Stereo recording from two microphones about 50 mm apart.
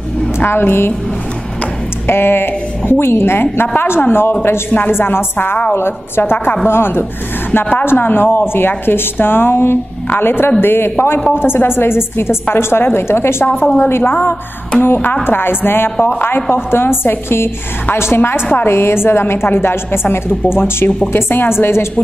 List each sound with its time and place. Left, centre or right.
0.5 s speech: left
2.0 s a woman's voice: left
4.0 s a woman's voice: left